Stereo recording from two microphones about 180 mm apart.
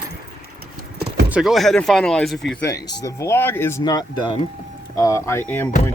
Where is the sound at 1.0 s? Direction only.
60° right (ahead or behind).